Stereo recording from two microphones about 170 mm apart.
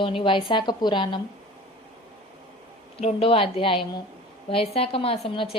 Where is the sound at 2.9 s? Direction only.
35° left (ahead or behind).